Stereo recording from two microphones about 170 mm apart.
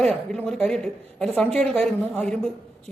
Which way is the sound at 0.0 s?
5° left (ahead or behind).